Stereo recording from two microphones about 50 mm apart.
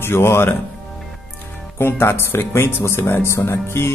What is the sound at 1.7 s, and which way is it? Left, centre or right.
Speech, left.